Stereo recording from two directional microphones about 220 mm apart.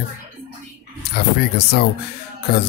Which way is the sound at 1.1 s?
45° left (ahead or behind).